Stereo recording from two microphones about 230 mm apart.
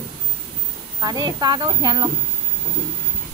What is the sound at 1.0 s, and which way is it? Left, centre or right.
Speech, centre.